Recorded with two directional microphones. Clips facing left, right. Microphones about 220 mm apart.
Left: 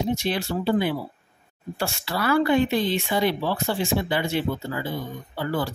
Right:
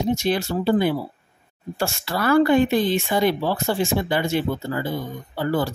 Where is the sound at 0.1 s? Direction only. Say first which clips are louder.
Right 3 dB; 45° right (ahead or behind).